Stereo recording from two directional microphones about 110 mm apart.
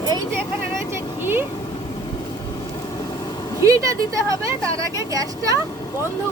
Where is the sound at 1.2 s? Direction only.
20° right (ahead or behind).